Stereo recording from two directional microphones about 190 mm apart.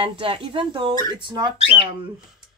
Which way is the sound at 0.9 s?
20° left (ahead or behind).